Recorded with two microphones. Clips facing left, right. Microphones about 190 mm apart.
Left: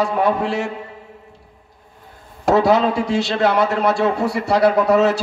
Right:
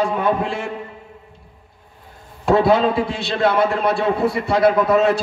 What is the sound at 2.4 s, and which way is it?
A man's voice, 80° left.